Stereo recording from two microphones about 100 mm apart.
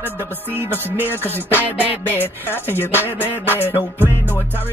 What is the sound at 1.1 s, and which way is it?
Music, 20° left (ahead or behind).